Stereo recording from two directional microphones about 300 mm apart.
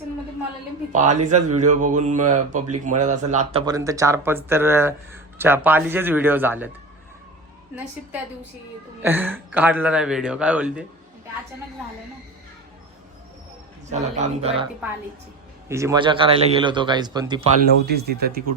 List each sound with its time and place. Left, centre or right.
0.9 s speech: right; by 6.7 s centre
9.0 s speech: centre
13.9 s speech: right
15.7 s speech: centre
17.8 s speech: right